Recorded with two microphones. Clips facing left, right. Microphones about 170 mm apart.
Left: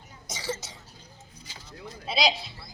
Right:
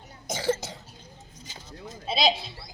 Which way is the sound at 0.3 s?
55° right (ahead or behind).